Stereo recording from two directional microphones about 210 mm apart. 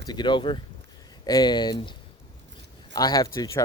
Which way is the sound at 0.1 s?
20° left (ahead or behind).